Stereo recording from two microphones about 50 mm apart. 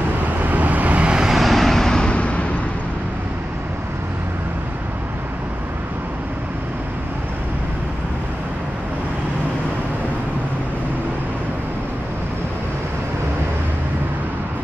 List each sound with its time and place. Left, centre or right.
0.4 s vehicle: right
1.2 s vehicle: centre; by 2.4 s left